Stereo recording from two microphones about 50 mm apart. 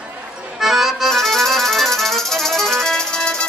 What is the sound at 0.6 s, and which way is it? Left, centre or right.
Accordion, centre.